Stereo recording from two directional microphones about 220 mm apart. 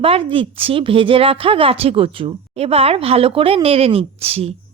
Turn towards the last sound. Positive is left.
turn(degrees=-25)  # may be behind; listen again after turning